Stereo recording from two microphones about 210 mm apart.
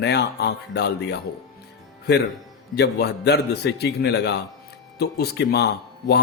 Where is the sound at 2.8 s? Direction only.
50° left (ahead or behind).